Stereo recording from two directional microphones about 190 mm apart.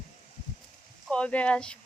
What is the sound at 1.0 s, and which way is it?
Speech, 5° left (ahead or behind).